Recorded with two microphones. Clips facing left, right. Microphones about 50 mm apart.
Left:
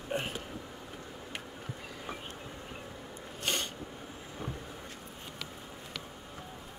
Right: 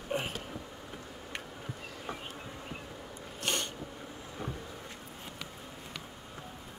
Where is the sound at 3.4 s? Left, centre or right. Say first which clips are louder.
Even; centre.